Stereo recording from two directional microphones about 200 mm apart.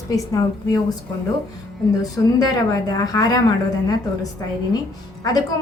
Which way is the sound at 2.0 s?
20° left (ahead or behind).